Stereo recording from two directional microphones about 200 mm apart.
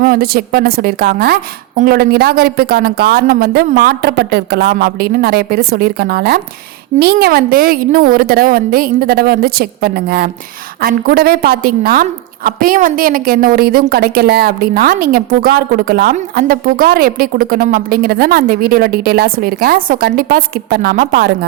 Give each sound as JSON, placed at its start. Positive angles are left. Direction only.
{"t": 0.0, "sound": "speech", "side_deg": -50}